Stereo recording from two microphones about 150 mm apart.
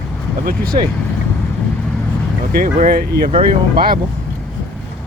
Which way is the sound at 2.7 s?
70° right (ahead or behind).